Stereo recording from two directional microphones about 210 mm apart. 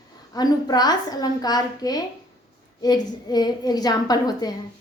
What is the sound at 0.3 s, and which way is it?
A woman's voice, 20° left (ahead or behind).